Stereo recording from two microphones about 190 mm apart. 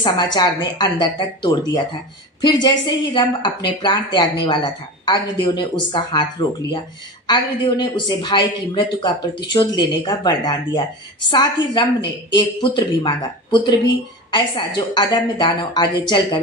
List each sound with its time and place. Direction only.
0.0 s speech: 20° left (ahead or behind)
7.2 s speech: 25° left (ahead or behind)